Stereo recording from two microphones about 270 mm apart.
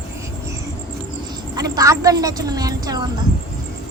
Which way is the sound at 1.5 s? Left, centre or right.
Centre.